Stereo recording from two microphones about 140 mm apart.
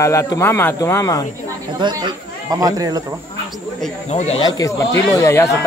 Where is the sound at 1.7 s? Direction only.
30° right (ahead or behind).